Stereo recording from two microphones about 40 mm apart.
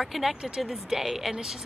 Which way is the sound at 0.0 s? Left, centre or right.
Centre.